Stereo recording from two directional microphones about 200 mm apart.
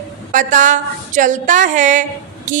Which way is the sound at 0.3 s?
40° right (ahead or behind).